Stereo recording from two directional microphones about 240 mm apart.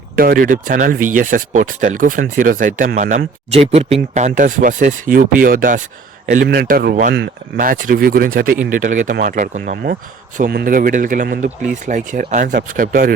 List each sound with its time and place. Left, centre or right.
0.2 s speech: right